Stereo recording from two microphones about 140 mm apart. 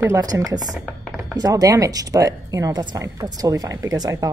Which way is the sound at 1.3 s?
25° right (ahead or behind).